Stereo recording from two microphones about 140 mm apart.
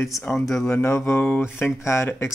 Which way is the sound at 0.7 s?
20° left (ahead or behind).